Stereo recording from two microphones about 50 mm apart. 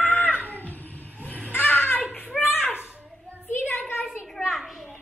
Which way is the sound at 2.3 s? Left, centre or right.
Centre.